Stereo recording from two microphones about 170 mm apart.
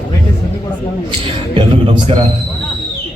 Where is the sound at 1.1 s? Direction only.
30° right (ahead or behind).